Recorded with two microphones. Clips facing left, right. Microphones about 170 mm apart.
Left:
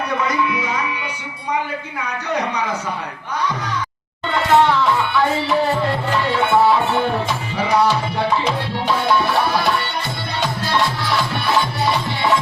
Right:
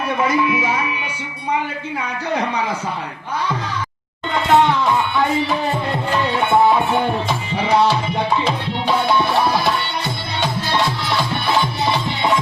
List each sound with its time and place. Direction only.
0.3 s music: 20° right (ahead or behind)
4.3 s music: 20° right (ahead or behind)
12.0 s music: 20° right (ahead or behind)